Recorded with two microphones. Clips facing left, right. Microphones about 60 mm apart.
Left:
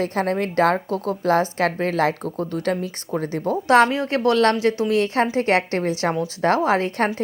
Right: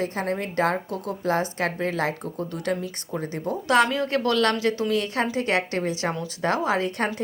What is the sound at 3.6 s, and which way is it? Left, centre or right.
A woman's voice, left.